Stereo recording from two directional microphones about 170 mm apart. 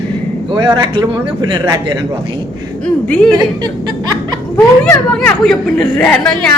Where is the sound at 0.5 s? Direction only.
25° right (ahead or behind).